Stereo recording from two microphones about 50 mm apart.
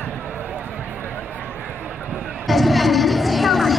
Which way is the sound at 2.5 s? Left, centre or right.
Centre.